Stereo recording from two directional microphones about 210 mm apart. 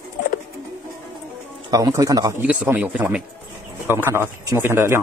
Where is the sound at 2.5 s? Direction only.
5° right (ahead or behind).